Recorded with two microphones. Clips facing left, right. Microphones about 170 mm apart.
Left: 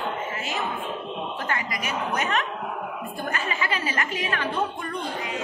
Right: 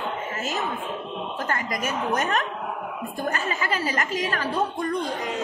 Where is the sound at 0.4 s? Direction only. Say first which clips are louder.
Right 1 dB; 40° right (ahead or behind).